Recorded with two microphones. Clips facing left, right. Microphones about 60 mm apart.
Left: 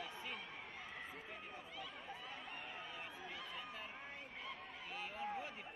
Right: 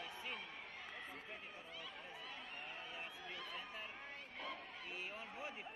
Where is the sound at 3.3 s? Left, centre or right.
Centre.